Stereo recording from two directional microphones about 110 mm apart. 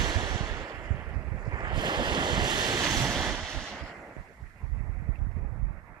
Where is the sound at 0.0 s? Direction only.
40° right (ahead or behind).